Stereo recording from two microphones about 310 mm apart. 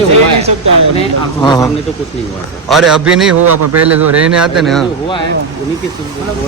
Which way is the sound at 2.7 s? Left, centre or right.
Centre.